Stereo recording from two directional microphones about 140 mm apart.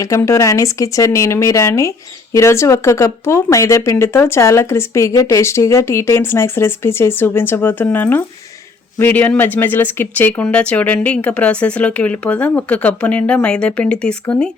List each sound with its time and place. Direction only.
0.0 s speech: 20° left (ahead or behind)